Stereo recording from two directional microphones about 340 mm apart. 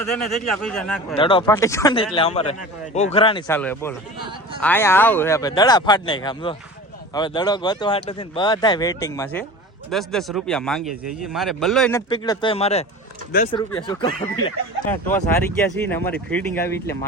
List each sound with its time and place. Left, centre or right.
0.2 s speech: centre
1.1 s speech: centre
3.4 s speech: centre